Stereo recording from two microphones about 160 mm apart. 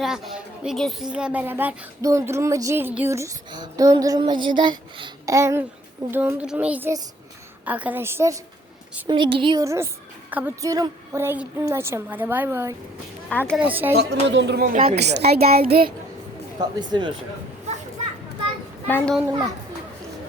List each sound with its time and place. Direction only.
0.0 s speech: centre (ahead or behind)
9.0 s speech: 30° right (ahead or behind)
9.6 s a woman's voice: 15° right (ahead or behind)
10.6 s speech: 25° right (ahead or behind)
13.9 s a woman's voice: 90° right; by 15.6 s 75° right (ahead or behind)
16.6 s speech: 30° right (ahead or behind)
18.9 s a child's voice: 10° left (ahead or behind)
19.3 s speech: 25° right (ahead or behind)